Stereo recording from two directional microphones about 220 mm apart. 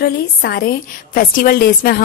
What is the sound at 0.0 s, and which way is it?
A woman's voice, 45° left (ahead or behind).